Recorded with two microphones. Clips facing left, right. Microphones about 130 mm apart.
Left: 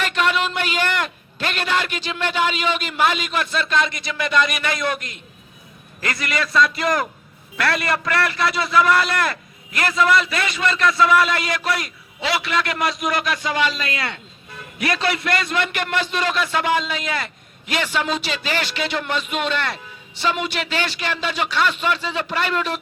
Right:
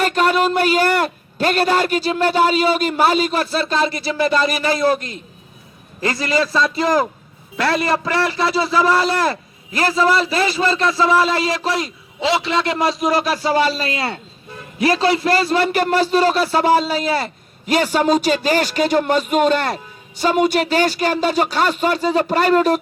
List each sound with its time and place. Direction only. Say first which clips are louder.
0.0 s a man's voice: right 5 dB; 40° right (ahead or behind)